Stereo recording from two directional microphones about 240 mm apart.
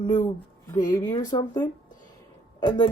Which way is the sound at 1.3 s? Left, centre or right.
Centre.